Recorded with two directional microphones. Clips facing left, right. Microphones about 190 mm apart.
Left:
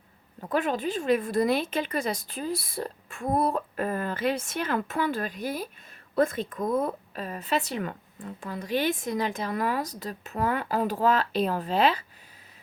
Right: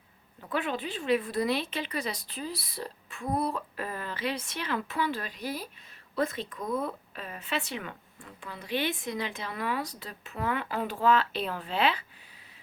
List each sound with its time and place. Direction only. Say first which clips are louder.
0.4 s a woman's voice: left 5 dB; 40° left (ahead or behind)